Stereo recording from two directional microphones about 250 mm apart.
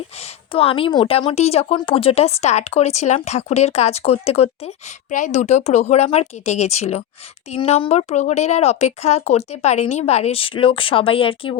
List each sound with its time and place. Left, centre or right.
0.2 s a woman's voice: left